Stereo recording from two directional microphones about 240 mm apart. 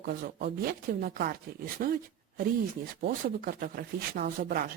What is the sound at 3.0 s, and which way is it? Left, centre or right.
Speech, right.